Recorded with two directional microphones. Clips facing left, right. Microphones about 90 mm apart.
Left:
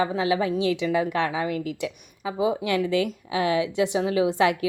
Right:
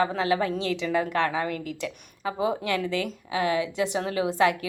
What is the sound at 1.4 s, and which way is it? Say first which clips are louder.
Speech: left 2 dB; 40° right (ahead or behind).